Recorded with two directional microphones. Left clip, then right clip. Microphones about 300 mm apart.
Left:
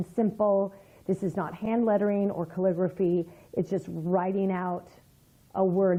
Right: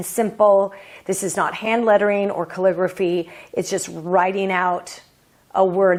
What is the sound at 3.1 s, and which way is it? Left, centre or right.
Speech, right.